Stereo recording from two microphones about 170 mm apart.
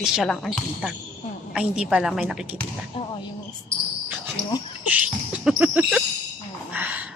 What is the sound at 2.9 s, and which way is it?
Speech, 35° left (ahead or behind).